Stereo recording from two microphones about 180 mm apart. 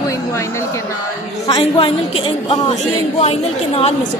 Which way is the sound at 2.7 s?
35° left (ahead or behind).